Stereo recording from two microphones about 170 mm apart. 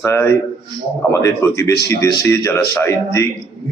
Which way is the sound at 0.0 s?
15° left (ahead or behind).